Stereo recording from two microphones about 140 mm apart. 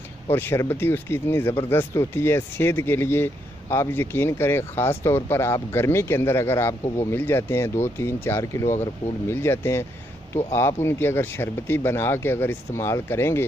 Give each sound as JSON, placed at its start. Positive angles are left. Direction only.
{"t": 0.3, "sound": "speech", "side_deg": 15}